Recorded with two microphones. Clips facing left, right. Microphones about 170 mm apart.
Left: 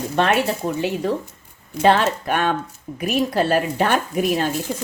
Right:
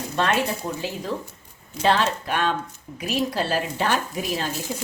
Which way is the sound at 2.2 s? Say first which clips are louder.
Left 3 dB; 50° left (ahead or behind).